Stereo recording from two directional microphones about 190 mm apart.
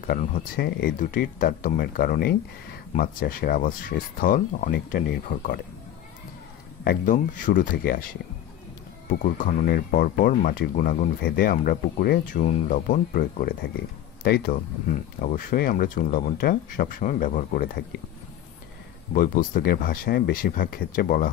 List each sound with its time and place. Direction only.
0.0 s speech: 45° left (ahead or behind)
6.8 s speech: 50° left (ahead or behind)
9.2 s speech: 45° left (ahead or behind)
19.1 s speech: 45° left (ahead or behind)